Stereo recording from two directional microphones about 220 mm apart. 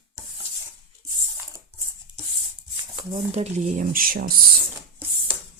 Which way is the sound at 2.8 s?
20° right (ahead or behind).